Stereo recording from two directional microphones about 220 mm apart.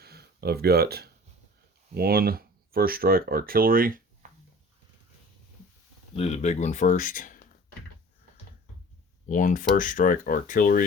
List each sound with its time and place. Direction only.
0.0 s a sound: 45° right (ahead or behind)
2.0 s speech: 45° right (ahead or behind)
6.1 s speech: 30° left (ahead or behind)
9.3 s speech: 35° left (ahead or behind)